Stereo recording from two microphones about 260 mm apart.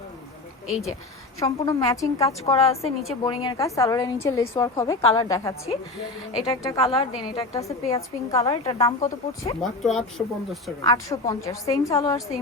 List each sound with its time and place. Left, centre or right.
1.4 s a woman's voice: centre
9.6 s speech: centre
10.8 s a woman's voice: centre